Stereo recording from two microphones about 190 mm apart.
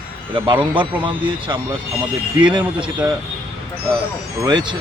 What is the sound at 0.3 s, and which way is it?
Speech, 25° right (ahead or behind).